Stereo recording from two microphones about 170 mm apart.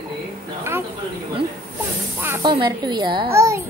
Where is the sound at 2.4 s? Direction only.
25° right (ahead or behind).